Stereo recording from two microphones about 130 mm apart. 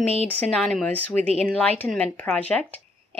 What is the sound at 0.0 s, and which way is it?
Speech, 50° right (ahead or behind).